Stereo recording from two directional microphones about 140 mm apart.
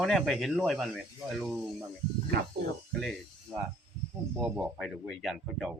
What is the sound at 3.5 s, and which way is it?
Snake, centre (ahead or behind).